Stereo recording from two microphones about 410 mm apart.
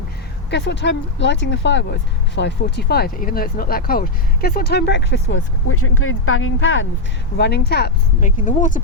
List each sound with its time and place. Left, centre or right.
0.5 s speech: left